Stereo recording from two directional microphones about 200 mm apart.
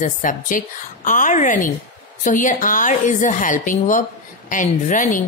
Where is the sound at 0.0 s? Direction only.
40° left (ahead or behind).